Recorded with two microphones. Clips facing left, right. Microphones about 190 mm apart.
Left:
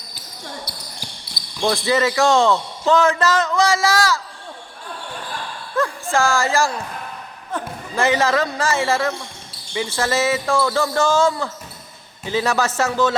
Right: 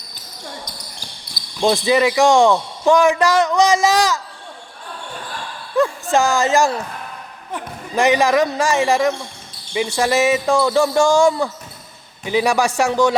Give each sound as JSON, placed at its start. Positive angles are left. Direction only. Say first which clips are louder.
{"t": 1.6, "sound": "a man's voice", "louder": "right 3 dB", "side_deg": -15}
{"t": 5.7, "sound": "a man's voice", "louder": "right 4 dB", "side_deg": -20}